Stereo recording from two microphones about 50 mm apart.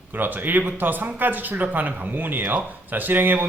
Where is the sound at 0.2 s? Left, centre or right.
Right.